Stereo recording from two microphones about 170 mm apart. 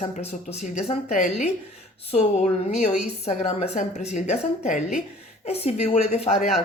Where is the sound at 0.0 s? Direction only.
40° left (ahead or behind).